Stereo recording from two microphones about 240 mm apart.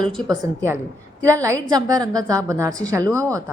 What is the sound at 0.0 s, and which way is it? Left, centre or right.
A woman's voice, centre.